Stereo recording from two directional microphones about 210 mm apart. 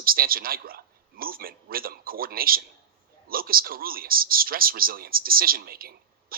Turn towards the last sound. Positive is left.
turn(degrees=-45)  # may be behind; listen again after turning